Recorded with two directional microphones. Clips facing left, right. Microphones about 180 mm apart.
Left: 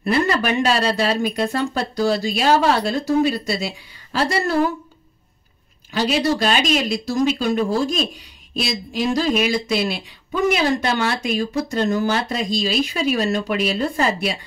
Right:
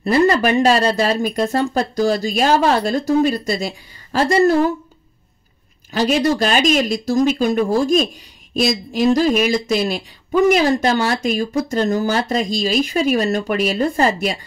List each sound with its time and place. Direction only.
0.0 s speech: 40° right (ahead or behind)
5.9 s speech: 45° right (ahead or behind)